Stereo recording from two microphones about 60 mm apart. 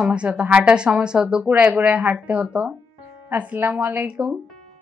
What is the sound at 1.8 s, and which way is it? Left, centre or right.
Speech, right.